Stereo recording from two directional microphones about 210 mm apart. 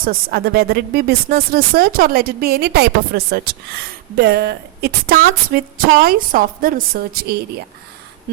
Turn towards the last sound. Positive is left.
turn(degrees=-45)  # may be behind; listen again after turning